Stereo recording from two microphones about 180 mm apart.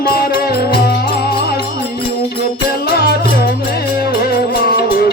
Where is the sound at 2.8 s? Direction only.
60° left (ahead or behind).